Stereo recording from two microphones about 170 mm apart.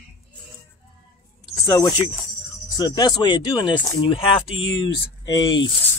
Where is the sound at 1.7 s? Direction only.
25° left (ahead or behind).